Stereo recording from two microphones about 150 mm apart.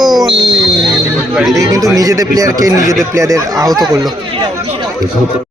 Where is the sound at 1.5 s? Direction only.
20° right (ahead or behind).